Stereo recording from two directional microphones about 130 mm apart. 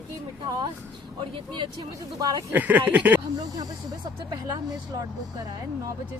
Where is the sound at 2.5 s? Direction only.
10° right (ahead or behind).